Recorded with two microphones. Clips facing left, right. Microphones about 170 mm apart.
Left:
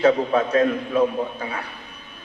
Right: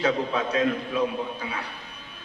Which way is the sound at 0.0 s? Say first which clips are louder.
Left 7 dB; 50° left (ahead or behind).